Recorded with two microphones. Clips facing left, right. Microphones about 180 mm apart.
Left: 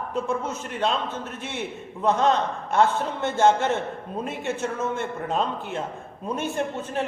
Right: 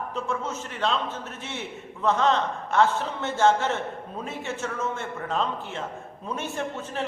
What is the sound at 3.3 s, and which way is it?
A man's voice, 15° left (ahead or behind).